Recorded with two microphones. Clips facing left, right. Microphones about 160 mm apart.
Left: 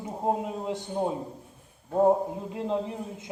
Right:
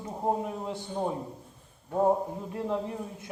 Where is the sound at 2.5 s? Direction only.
20° left (ahead or behind).